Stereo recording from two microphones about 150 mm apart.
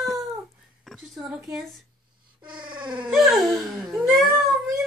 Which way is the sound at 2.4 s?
30° right (ahead or behind).